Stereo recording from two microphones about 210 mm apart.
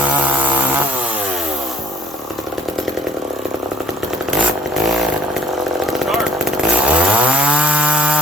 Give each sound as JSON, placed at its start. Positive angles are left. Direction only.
{"t": 5.8, "sound": "chainsaw", "side_deg": 0}